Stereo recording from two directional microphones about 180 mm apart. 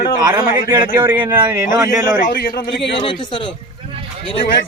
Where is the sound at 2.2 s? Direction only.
55° left (ahead or behind).